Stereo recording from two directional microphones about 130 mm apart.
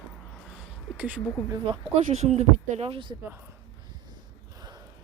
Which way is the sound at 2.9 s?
40° right (ahead or behind).